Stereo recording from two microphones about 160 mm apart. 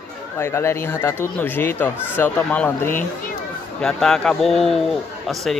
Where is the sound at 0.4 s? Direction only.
15° left (ahead or behind).